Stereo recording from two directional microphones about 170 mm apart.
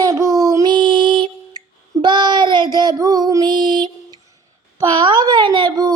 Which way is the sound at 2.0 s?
25° right (ahead or behind).